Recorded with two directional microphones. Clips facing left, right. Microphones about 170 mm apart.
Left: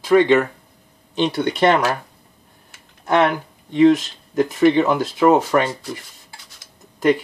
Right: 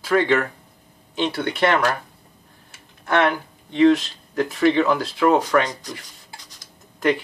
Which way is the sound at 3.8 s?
20° left (ahead or behind).